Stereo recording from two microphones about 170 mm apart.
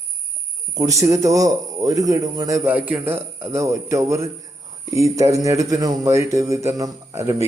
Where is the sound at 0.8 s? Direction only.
20° right (ahead or behind).